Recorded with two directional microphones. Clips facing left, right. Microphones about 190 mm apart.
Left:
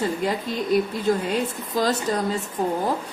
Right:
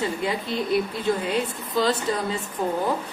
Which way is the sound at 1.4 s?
45° left (ahead or behind).